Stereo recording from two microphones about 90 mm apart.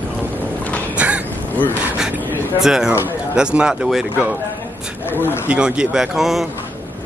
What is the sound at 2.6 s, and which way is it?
A man's voice, 5° right (ahead or behind).